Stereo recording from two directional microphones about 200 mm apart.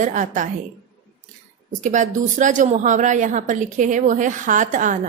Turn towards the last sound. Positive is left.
turn(degrees=-40)  # may be behind; listen again after turning